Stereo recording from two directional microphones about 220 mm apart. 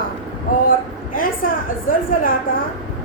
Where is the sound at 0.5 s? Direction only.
40° left (ahead or behind).